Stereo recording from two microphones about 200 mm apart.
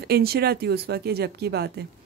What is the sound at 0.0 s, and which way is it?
A woman's voice, 50° right (ahead or behind).